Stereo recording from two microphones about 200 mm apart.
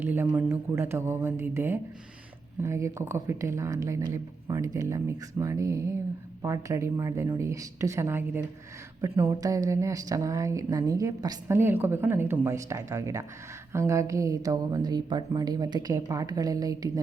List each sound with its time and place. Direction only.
0.0 s speech: 10° right (ahead or behind)